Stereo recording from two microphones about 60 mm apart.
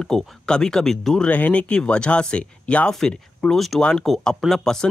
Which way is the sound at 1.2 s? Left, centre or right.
Left.